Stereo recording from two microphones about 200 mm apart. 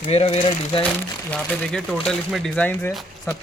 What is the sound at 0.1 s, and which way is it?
Speech, 30° left (ahead or behind).